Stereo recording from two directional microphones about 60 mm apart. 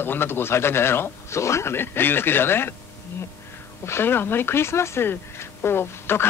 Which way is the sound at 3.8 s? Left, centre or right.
Left.